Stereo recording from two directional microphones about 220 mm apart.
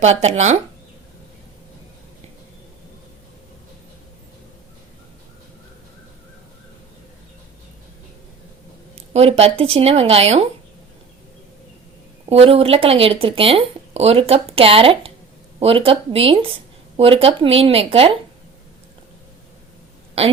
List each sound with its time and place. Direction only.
0.0 s speech: 30° right (ahead or behind)
9.0 s speech: 30° right (ahead or behind)
12.3 s speech: 25° right (ahead or behind)